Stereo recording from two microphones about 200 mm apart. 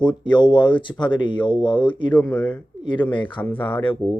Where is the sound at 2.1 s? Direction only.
10° left (ahead or behind).